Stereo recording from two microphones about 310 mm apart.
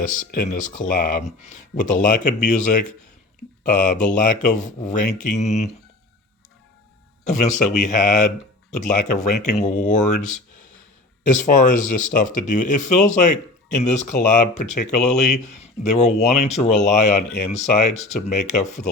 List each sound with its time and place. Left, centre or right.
0.0 s speech: left
7.3 s speech: left